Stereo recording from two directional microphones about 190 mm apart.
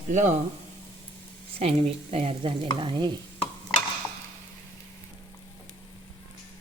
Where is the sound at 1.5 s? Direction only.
30° right (ahead or behind).